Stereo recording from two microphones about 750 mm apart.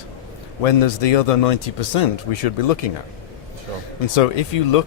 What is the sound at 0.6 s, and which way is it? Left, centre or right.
Speech, left.